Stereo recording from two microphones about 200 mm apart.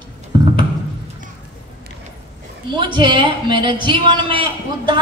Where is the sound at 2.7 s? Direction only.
25° right (ahead or behind).